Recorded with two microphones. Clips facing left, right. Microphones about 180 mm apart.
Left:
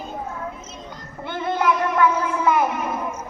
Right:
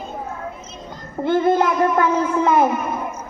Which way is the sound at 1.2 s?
45° right (ahead or behind).